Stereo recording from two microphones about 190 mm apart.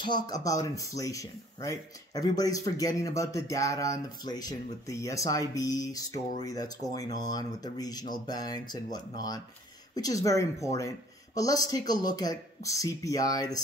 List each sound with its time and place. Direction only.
0.0 s speech: 20° left (ahead or behind)